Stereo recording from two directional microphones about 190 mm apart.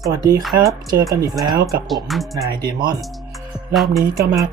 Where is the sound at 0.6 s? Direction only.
20° right (ahead or behind).